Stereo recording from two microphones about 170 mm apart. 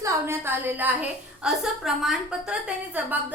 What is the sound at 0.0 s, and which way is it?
A woman's voice, 15° right (ahead or behind).